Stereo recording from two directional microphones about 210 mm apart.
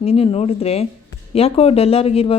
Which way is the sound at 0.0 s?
30° left (ahead or behind).